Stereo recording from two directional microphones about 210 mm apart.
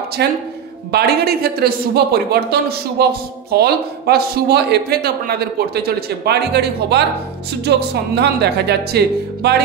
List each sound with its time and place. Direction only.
0.2 s a man's voice: 50° right (ahead or behind)